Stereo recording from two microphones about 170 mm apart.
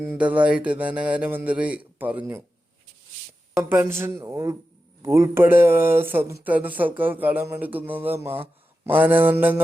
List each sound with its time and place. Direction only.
0.0 s speech: 10° right (ahead or behind)
3.7 s speech: 15° right (ahead or behind)